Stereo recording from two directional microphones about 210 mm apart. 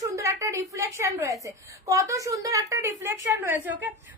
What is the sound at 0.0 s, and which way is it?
A woman's voice, 15° right (ahead or behind).